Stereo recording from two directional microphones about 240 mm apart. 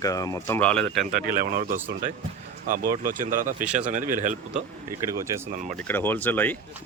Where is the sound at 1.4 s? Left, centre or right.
Right.